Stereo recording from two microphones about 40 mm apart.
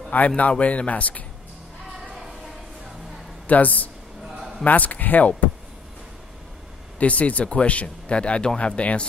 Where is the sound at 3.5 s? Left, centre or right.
Left.